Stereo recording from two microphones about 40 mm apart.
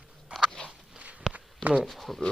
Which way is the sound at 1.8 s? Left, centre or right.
Centre.